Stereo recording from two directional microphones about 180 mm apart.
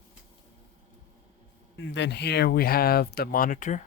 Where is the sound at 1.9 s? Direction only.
75° left (ahead or behind); by 3.8 s 45° left (ahead or behind).